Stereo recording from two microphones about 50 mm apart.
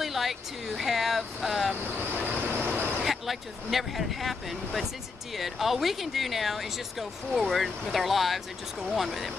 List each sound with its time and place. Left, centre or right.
0.0 s vehicle: centre
2.0 s vehicle: right
3.0 s speech: centre